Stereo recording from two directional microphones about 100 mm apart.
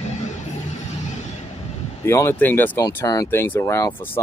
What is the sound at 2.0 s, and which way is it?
Speech, 25° left (ahead or behind).